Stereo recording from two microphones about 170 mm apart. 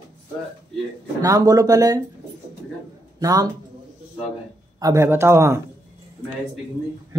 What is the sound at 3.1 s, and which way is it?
Speech, 20° right (ahead or behind).